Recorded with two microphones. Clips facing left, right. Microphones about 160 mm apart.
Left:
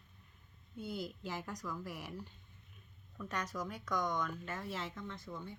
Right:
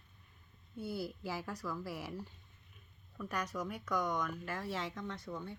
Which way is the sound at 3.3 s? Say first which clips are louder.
Right 1 dB; 10° right (ahead or behind).